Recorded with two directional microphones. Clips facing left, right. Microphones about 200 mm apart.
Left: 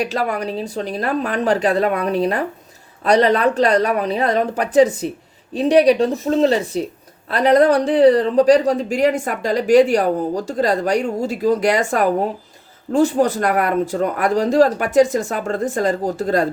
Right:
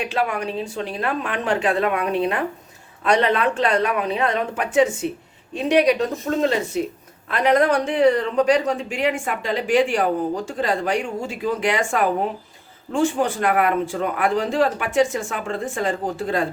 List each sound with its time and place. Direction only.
0.0 s speech: 40° left (ahead or behind)